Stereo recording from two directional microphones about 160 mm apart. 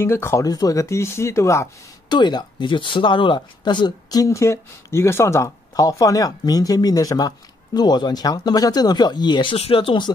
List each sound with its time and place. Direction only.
0.0 s speech: 15° left (ahead or behind)